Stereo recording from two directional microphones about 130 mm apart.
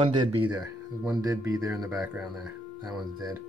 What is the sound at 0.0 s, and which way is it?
Speech, 40° right (ahead or behind).